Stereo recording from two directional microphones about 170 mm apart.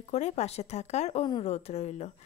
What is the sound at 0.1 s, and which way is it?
A woman's voice, 40° left (ahead or behind).